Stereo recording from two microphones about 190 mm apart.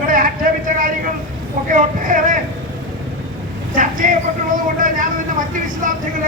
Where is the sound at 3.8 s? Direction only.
45° right (ahead or behind).